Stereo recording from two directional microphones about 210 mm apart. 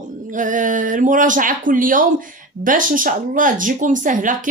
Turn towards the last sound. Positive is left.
turn(degrees=-40)  # may be behind; listen again after turning